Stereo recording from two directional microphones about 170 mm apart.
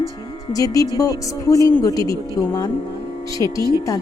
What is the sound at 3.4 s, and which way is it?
Speech, 20° left (ahead or behind).